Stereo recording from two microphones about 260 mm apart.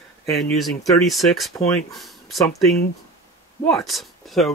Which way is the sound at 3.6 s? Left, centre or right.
Centre.